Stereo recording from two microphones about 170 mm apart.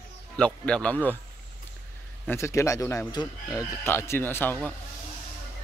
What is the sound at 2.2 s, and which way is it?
Speech, 15° left (ahead or behind).